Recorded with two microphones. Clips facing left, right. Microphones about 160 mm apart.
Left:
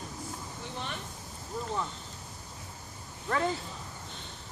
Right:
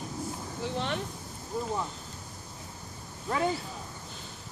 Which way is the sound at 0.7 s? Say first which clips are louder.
Right 7 dB; 75° right (ahead or behind).